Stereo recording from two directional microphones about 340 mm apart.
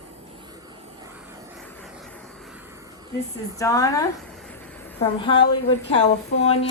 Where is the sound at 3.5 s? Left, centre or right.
Centre.